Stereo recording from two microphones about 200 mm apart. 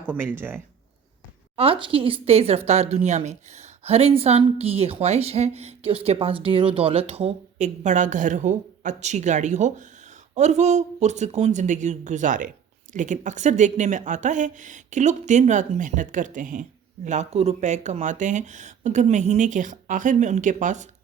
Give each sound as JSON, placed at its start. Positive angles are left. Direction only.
{"t": 0.1, "sound": "speech", "side_deg": -10}
{"t": 1.5, "sound": "speech", "side_deg": -30}